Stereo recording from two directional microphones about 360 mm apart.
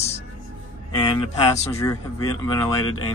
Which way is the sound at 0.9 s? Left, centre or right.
Centre.